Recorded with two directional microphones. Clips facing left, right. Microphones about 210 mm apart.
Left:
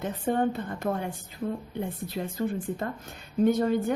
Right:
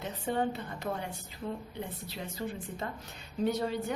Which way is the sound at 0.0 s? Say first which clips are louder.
Left 6 dB; 50° left (ahead or behind).